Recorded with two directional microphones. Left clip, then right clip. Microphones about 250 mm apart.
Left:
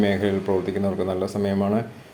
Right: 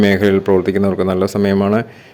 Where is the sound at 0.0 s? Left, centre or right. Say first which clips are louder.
Right 9 dB; right.